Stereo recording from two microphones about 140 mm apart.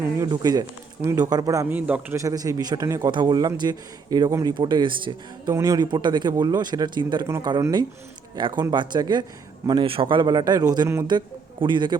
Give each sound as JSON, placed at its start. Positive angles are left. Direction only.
{"t": 0.3, "sound": "a man's voice", "side_deg": -30}
{"t": 1.7, "sound": "a man's voice", "side_deg": -15}
{"t": 2.2, "sound": "a man's voice", "side_deg": -25}
{"t": 5.5, "sound": "speech", "side_deg": -25}
{"t": 7.3, "sound": "a man's voice", "side_deg": -20}
{"t": 8.4, "sound": "speech", "side_deg": -35}
{"t": 11.6, "sound": "speech", "side_deg": -35}